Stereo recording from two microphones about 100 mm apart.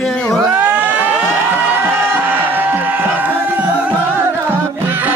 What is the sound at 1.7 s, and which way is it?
Music, 20° right (ahead or behind).